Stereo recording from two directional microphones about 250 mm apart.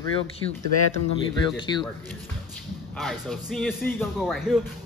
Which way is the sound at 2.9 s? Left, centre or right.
Centre.